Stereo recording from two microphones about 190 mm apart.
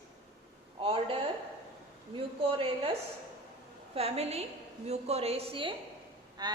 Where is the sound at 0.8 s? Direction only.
30° right (ahead or behind).